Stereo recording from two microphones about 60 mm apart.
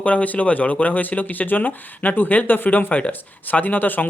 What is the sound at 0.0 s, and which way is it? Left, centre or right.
Speech, left.